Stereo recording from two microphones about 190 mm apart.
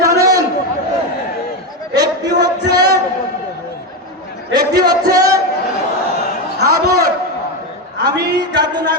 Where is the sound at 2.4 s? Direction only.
20° right (ahead or behind).